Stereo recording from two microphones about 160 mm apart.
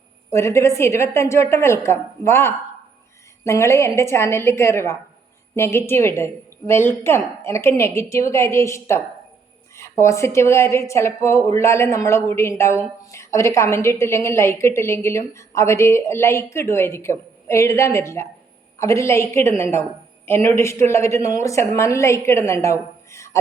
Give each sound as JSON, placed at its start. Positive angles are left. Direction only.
{"t": 0.3, "sound": "a woman's voice", "side_deg": 15}